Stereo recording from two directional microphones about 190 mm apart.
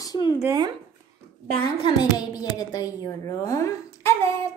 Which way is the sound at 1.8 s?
20° left (ahead or behind).